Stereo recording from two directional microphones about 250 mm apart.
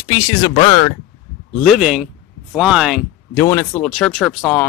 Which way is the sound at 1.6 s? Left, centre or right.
Centre.